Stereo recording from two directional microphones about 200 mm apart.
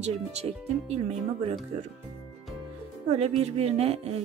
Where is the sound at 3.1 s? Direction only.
30° right (ahead or behind).